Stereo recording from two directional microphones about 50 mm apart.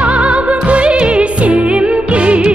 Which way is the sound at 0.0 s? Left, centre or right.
Right.